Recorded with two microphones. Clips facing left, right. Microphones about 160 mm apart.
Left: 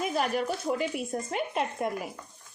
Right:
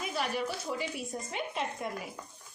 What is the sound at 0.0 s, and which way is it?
Speech, 50° left (ahead or behind).